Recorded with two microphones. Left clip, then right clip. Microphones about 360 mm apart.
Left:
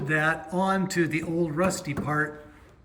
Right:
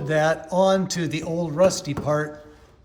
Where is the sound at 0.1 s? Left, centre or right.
Centre.